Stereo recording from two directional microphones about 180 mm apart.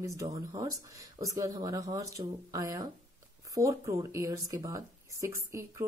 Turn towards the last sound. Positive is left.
turn(degrees=-15)  # may be behind; listen again after turning